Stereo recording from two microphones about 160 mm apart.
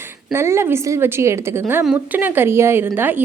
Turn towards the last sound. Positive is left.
turn(degrees=-15)  # may be behind; listen again after turning